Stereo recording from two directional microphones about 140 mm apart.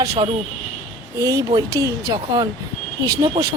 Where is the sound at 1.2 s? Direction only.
25° right (ahead or behind).